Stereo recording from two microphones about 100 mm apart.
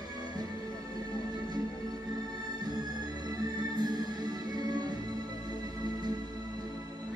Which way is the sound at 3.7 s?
45° right (ahead or behind).